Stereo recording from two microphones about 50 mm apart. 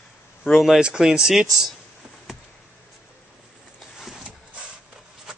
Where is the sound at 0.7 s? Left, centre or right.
Centre.